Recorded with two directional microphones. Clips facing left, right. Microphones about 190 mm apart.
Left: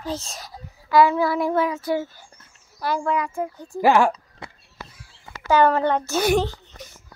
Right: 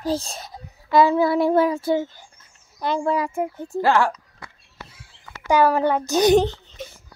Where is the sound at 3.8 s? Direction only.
20° left (ahead or behind).